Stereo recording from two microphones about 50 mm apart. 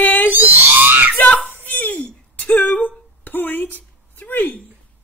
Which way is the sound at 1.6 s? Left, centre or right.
Left.